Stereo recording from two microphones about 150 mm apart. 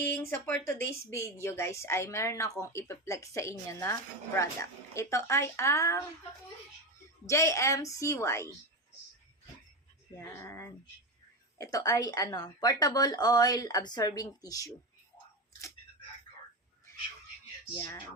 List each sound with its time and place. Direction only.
0.0 s a woman's voice: 15° left (ahead or behind)
7.3 s a woman's voice: 20° left (ahead or behind)
10.2 s a woman's voice: 15° left (ahead or behind)